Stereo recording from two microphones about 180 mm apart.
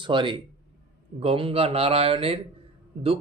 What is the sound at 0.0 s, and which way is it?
Speech, 25° right (ahead or behind).